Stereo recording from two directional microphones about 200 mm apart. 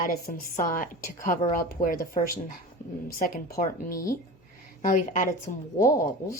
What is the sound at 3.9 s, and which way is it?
Speech, 15° left (ahead or behind).